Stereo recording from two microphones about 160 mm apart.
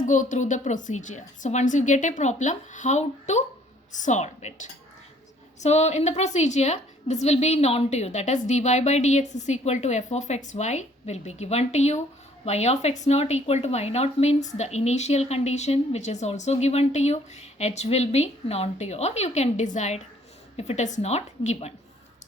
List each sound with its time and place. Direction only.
0.0 s a woman's voice: 55° left (ahead or behind)